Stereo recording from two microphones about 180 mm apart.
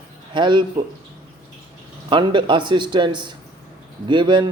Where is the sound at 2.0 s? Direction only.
25° right (ahead or behind).